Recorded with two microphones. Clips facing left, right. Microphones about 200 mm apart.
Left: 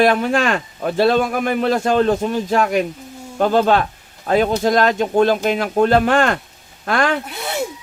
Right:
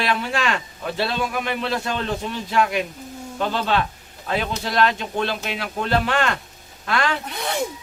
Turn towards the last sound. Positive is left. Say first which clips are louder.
# left 2 dB
turn(degrees=5)  # may be behind; listen again after turning